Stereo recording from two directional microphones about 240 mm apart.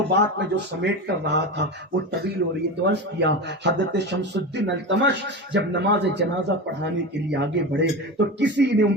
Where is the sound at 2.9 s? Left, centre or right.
Right.